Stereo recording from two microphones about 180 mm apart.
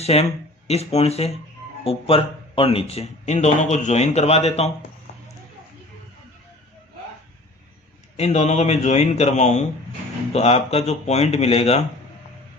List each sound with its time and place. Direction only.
0.0 s speech: 35° left (ahead or behind)
5.1 s clip-clop: 40° left (ahead or behind)
8.1 s speech: 35° left (ahead or behind)